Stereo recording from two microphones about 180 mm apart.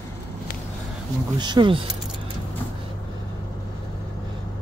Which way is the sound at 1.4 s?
25° right (ahead or behind).